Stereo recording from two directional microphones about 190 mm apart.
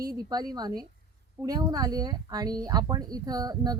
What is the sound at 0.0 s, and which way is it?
Speech, 20° right (ahead or behind).